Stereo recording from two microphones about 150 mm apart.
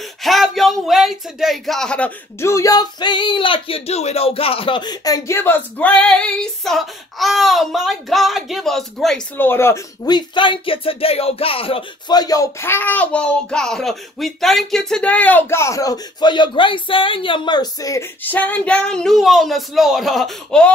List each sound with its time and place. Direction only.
0.2 s speech: centre (ahead or behind)
2.4 s speech: 20° left (ahead or behind); by 9.2 s 5° left (ahead or behind)
9.4 s speech: 15° left (ahead or behind)
10.0 s speech: 30° left (ahead or behind); by 20.7 s 5° left (ahead or behind)